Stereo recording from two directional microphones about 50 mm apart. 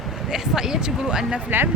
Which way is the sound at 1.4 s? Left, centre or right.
Right.